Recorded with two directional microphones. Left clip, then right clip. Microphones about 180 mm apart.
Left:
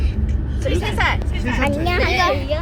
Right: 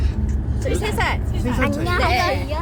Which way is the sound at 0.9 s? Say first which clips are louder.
Left 3 dB; 40° right (ahead or behind).